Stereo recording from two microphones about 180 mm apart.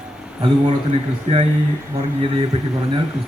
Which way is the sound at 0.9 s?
35° right (ahead or behind).